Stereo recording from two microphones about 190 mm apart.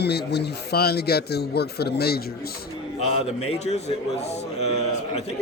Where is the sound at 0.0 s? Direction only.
60° left (ahead or behind).